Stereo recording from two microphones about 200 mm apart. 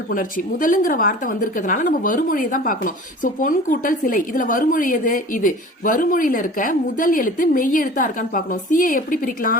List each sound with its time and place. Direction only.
0.1 s a woman's voice: 45° left (ahead or behind)